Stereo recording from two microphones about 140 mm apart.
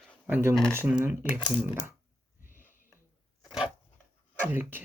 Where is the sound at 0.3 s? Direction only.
15° right (ahead or behind).